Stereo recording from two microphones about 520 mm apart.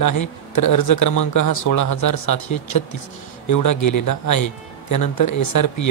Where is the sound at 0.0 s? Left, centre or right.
Left.